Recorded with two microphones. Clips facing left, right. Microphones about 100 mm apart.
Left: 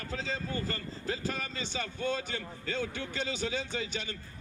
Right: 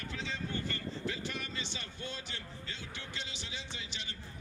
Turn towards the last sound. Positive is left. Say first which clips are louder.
# left 11 dB
turn(degrees=45)  # may be behind; listen again after turning